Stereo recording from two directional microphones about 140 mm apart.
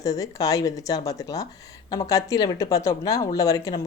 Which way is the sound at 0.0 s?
25° left (ahead or behind).